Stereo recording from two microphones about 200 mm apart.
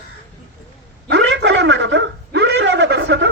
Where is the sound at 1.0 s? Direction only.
60° right (ahead or behind).